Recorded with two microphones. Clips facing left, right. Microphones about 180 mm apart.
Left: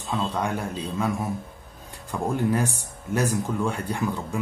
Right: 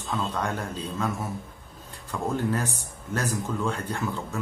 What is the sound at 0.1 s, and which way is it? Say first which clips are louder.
Speech: left 2 dB; 10° left (ahead or behind).